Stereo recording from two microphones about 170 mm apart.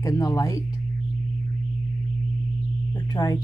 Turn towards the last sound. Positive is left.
turn(degrees=20)  # may be behind; listen again after turning